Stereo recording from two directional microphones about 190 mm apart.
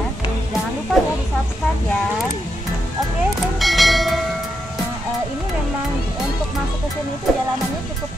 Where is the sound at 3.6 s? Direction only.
Centre (ahead or behind).